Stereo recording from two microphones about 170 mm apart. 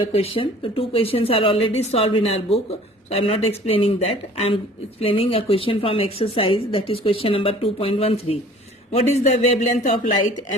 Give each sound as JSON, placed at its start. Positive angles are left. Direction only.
{"t": 0.1, "sound": "speech", "side_deg": 35}